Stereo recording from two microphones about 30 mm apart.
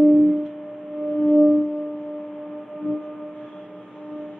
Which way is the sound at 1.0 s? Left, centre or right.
Left.